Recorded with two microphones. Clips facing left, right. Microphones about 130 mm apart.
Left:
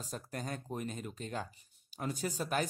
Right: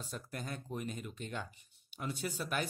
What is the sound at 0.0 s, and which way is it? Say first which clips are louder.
Speech: left 2 dB; 40° left (ahead or behind).